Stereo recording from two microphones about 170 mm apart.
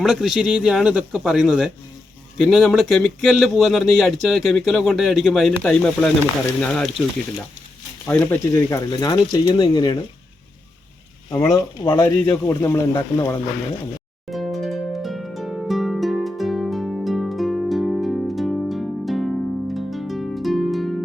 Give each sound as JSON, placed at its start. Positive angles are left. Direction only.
{"t": 0.0, "sound": "speech", "side_deg": 0}
{"t": 8.0, "sound": "speech", "side_deg": 10}
{"t": 11.3, "sound": "speech", "side_deg": 20}
{"t": 14.3, "sound": "harp", "side_deg": 0}